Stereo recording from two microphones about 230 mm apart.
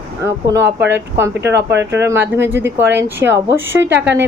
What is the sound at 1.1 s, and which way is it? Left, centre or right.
Speech, centre.